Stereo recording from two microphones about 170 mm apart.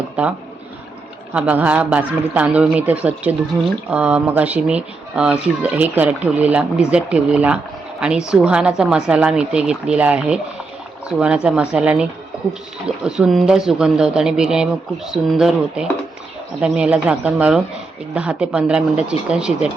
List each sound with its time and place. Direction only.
0.2 s a man's voice: 10° right (ahead or behind)
13.1 s a man's voice: 5° right (ahead or behind)